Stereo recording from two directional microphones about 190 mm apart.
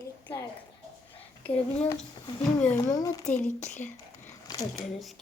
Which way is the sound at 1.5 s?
35° left (ahead or behind).